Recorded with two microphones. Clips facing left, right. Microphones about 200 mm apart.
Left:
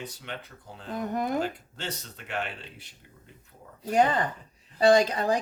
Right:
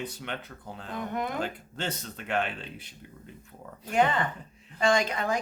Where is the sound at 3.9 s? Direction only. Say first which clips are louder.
Left 2 dB; 40° left (ahead or behind).